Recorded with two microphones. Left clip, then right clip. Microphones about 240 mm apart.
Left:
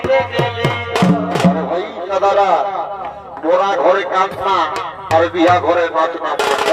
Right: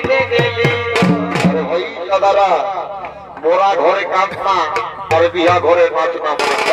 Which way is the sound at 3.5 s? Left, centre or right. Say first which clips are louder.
Even; centre.